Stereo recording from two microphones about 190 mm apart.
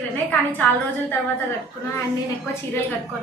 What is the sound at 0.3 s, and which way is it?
Speech, 10° left (ahead or behind).